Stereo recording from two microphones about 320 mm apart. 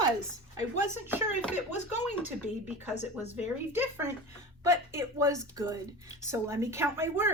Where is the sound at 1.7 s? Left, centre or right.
Left.